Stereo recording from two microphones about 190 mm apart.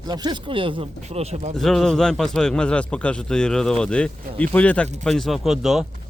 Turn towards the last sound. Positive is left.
turn(degrees=0)  # may be behind; listen again after turning